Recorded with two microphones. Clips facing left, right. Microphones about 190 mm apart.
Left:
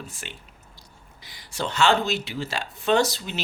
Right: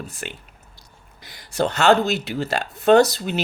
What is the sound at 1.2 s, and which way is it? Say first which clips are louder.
Speech: right 8 dB; 45° right (ahead or behind).